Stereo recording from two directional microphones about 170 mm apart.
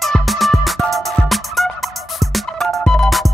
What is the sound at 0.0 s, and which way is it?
Music, centre (ahead or behind).